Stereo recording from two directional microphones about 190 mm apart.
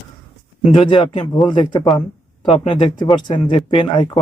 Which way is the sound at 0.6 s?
25° left (ahead or behind).